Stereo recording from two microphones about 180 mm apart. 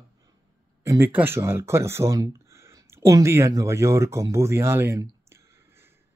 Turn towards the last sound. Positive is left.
turn(degrees=-15)  # may be behind; listen again after turning